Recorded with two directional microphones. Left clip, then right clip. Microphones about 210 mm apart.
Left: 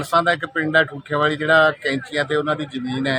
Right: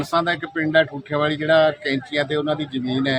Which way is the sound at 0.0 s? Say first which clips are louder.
Left 3 dB; centre (ahead or behind).